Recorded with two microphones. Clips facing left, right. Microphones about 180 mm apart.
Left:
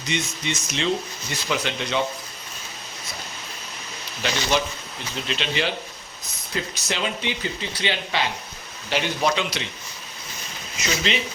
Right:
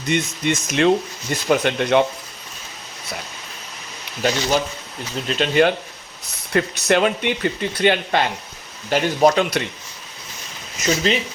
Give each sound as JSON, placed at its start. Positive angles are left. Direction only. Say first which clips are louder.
{"t": 0.0, "sound": "speech", "louder": "right 7 dB", "side_deg": -55}
{"t": 4.2, "sound": "speech", "louder": "right 4 dB", "side_deg": -45}
{"t": 6.5, "sound": "speech", "louder": "right 11 dB", "side_deg": -65}
{"t": 10.8, "sound": "speech", "louder": "right 6 dB", "side_deg": -45}